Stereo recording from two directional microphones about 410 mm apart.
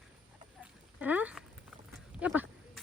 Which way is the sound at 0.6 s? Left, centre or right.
Centre.